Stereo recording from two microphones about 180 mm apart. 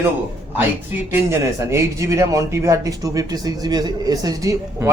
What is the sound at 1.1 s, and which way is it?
A man's voice, 15° right (ahead or behind).